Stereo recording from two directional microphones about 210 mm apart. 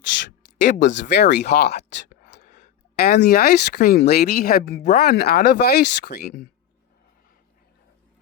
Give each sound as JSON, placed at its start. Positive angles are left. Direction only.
{"t": 0.6, "sound": "speech", "side_deg": 35}
{"t": 0.9, "sound": "speech", "side_deg": 60}
{"t": 1.3, "sound": "speech", "side_deg": 35}
{"t": 1.7, "sound": "whispering", "side_deg": 35}
{"t": 2.4, "sound": "speech", "side_deg": 40}